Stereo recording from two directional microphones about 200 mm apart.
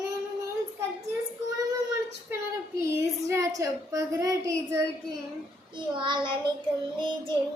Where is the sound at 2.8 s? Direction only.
15° right (ahead or behind).